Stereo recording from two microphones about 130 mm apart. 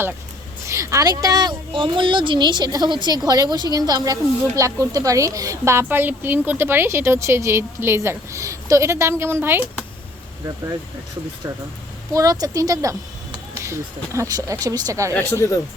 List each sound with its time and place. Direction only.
0.7 s a woman's voice: 25° right (ahead or behind)
11.4 s speech: 20° right (ahead or behind)
15.1 s speech: 20° left (ahead or behind)